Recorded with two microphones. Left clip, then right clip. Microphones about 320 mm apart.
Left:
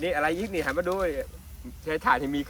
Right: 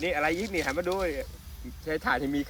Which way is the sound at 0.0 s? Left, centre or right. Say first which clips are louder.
Left 1 dB; left.